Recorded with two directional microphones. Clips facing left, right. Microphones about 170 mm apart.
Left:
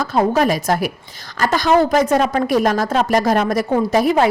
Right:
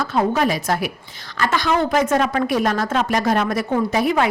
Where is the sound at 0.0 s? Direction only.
40° left (ahead or behind).